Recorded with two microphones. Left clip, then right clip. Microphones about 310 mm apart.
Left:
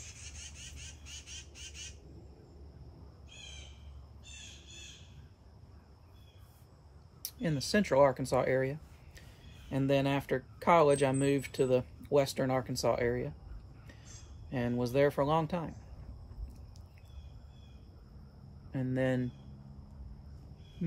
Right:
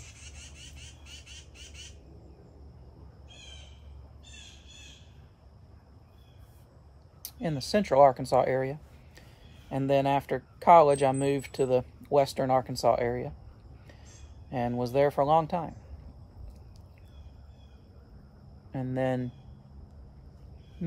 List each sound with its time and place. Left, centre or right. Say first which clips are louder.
0.7 s squawk: even; right
7.2 s speech: right 2 dB; centre
14.5 s speech: right 4 dB; centre
18.7 s speech: right 3 dB; centre